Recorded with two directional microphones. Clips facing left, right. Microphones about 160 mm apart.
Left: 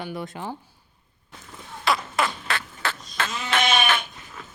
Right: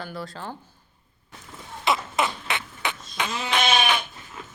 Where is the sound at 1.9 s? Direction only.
20° right (ahead or behind).